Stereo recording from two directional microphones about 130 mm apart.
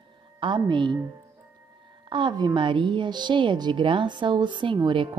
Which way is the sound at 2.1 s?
35° right (ahead or behind).